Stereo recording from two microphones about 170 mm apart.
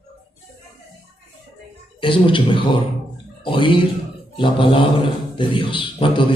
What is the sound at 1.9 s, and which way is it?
Speech, 30° left (ahead or behind).